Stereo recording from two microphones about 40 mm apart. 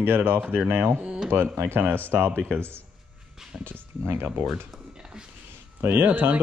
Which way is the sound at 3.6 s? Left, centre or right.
Right.